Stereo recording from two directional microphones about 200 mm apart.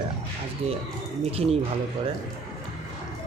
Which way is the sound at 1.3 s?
30° right (ahead or behind).